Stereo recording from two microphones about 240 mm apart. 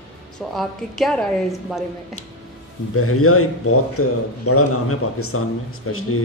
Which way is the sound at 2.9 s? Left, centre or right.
Left.